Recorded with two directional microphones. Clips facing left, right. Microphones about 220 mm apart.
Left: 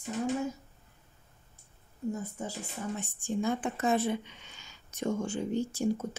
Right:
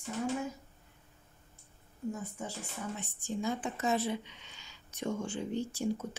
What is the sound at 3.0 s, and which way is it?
Speech, 50° left (ahead or behind).